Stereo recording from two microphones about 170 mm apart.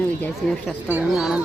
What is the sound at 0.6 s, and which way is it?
Speech, centre (ahead or behind).